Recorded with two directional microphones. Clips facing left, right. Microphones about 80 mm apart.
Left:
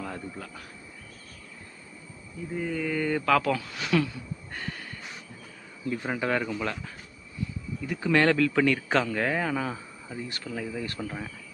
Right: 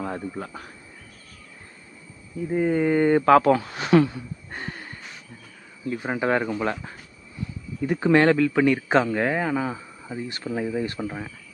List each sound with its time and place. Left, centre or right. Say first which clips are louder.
0.0 s speech: right 6 dB; right
2.5 s speech: right 9 dB; right
5.9 s speech: right 4 dB; centre
7.8 s speech: right 8 dB; right
8.1 s a man's voice: right 4 dB; centre
10.2 s speech: right 8 dB; right